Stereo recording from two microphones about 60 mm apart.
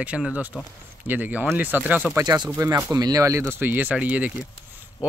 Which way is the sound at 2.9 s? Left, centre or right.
Right.